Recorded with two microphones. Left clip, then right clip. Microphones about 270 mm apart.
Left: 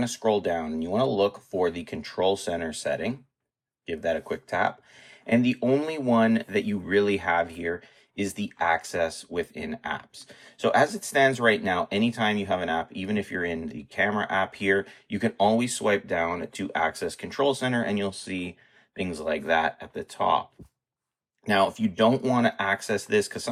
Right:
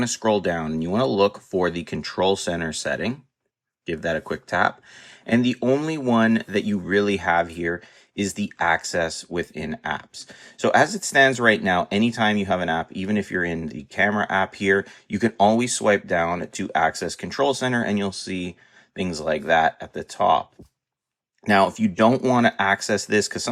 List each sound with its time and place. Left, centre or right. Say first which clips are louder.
0.0 s speech: right 3 dB; right